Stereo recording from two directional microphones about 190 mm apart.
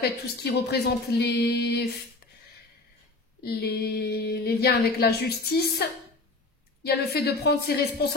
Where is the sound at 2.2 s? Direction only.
55° left (ahead or behind).